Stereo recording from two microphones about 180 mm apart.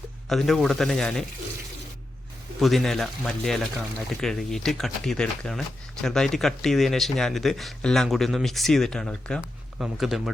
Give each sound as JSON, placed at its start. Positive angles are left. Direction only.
{"t": 0.3, "sound": "speech", "side_deg": 0}
{"t": 2.6, "sound": "speech", "side_deg": 0}